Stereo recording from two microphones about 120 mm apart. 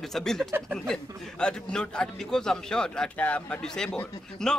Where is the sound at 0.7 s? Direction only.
5° left (ahead or behind).